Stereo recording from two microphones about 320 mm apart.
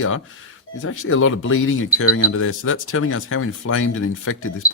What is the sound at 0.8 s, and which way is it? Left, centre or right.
Speech, left.